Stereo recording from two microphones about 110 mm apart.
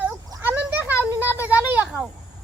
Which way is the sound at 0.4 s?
15° right (ahead or behind).